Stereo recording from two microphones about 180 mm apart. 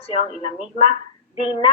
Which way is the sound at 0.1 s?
35° left (ahead or behind).